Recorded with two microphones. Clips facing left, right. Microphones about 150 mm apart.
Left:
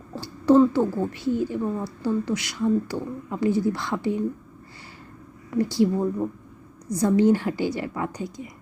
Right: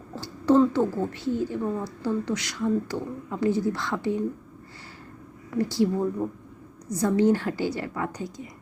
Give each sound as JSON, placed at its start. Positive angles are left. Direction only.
{"t": 0.2, "sound": "a woman's voice", "side_deg": 10}
{"t": 5.5, "sound": "speech", "side_deg": 15}